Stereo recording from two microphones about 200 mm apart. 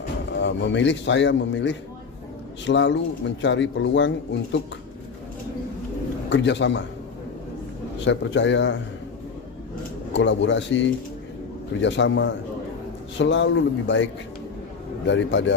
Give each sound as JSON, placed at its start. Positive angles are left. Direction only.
{"t": 0.3, "sound": "speech", "side_deg": 65}
{"t": 6.3, "sound": "speech", "side_deg": 65}
{"t": 8.0, "sound": "speech", "side_deg": 65}
{"t": 10.1, "sound": "speech", "side_deg": 65}